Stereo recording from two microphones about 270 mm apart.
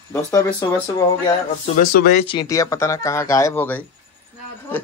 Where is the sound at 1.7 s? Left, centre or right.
Left.